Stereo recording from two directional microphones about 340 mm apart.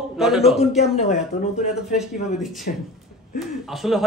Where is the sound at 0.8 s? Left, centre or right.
Centre.